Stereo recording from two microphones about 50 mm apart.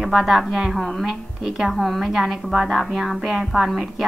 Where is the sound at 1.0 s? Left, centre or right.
Centre.